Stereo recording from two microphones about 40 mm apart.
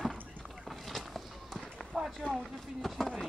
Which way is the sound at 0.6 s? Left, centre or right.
Centre.